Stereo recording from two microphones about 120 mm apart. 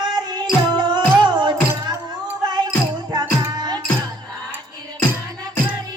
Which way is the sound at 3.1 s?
35° right (ahead or behind).